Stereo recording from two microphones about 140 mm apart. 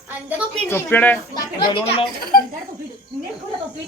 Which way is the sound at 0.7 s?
15° left (ahead or behind).